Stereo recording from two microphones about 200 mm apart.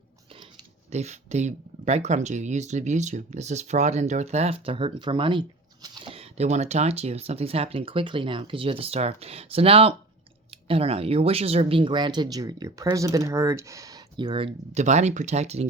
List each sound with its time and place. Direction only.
0.9 s speech: 35° right (ahead or behind)